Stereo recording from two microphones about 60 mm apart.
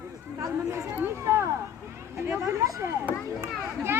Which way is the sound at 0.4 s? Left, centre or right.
Right.